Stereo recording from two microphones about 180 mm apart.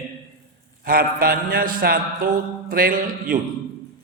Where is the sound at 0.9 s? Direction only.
55° right (ahead or behind).